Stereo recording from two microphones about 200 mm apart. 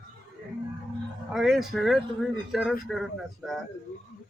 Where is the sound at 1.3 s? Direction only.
Centre (ahead or behind).